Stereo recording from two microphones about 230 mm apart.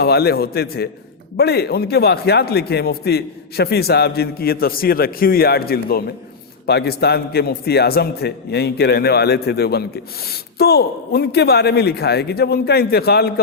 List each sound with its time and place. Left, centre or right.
0.0 s a man's voice: left